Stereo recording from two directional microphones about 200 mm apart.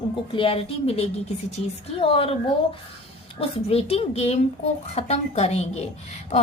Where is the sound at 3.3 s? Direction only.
30° left (ahead or behind).